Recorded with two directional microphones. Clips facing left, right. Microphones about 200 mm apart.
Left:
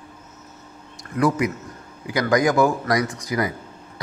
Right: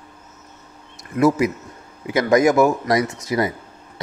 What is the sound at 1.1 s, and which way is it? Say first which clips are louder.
Speech: right 4 dB; 25° right (ahead or behind).